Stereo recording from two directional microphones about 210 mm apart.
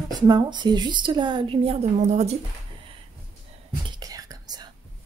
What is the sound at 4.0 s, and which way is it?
Whispering, 15° right (ahead or behind).